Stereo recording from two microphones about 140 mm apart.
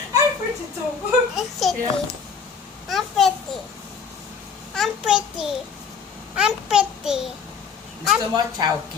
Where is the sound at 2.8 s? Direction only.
Centre (ahead or behind).